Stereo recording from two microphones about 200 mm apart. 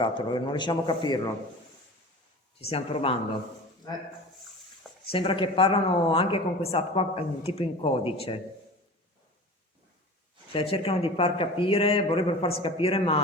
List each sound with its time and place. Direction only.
0.0 s a woman's voice: 25° left (ahead or behind)
2.6 s a woman's voice: 30° left (ahead or behind)
5.0 s a woman's voice: 25° left (ahead or behind)
10.5 s a woman's voice: 30° left (ahead or behind)